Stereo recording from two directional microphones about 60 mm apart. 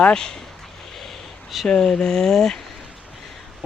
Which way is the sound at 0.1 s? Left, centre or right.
Centre.